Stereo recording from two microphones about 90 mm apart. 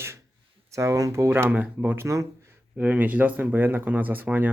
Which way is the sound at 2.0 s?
35° right (ahead or behind).